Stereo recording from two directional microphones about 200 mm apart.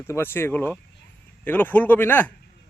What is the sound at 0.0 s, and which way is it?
Speech, 10° left (ahead or behind).